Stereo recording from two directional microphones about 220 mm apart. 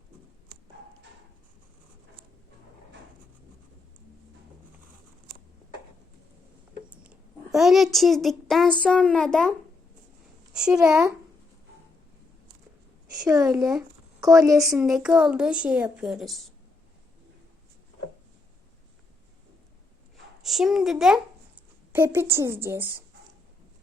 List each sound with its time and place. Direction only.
7.5 s a child's voice: centre (ahead or behind)
13.1 s a woman's voice: 15° right (ahead or behind)
13.5 s a child's voice: centre (ahead or behind)
14.2 s speech: 15° right (ahead or behind)
14.5 s a child's voice: centre (ahead or behind)
20.4 s a woman's voice: centre (ahead or behind)